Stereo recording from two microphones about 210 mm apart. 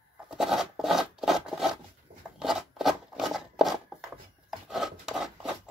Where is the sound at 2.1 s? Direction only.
45° right (ahead or behind).